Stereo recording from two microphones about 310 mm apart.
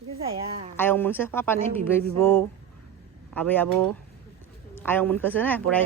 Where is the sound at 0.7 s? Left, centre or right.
Centre.